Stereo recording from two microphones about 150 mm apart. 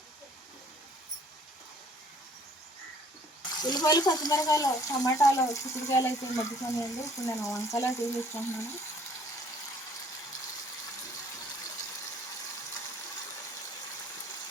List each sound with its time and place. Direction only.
3.6 s speech: 25° left (ahead or behind)